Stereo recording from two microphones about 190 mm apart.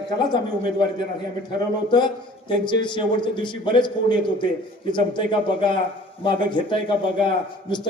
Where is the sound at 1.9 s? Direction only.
25° left (ahead or behind).